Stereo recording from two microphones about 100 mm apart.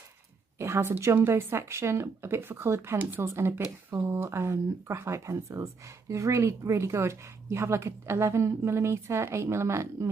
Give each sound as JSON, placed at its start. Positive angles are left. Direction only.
{"t": 0.6, "sound": "speech", "side_deg": -25}